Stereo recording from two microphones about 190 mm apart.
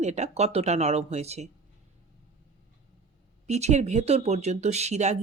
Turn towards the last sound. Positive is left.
turn(degrees=-35)  # may be behind; listen again after turning